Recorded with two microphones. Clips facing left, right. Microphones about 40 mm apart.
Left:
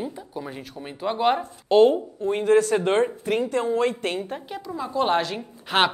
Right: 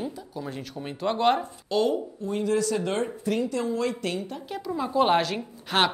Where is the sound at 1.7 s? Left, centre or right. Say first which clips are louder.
Left 8 dB; left.